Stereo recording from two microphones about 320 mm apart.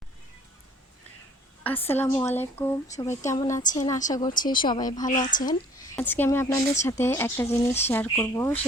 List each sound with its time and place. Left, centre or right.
1.6 s speech: centre
5.1 s speech: left
5.5 s speech: centre